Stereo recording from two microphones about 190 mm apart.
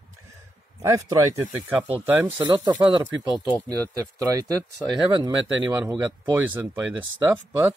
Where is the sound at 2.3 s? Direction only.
20° right (ahead or behind).